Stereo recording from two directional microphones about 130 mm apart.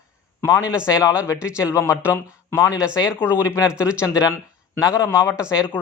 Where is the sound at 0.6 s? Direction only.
10° right (ahead or behind).